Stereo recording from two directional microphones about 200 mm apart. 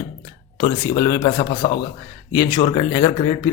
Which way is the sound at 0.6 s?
15° left (ahead or behind).